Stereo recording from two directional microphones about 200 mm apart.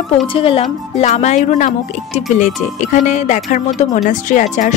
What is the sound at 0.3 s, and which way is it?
Speech, 25° left (ahead or behind).